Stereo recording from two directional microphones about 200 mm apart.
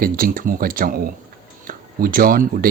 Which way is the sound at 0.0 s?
45° right (ahead or behind).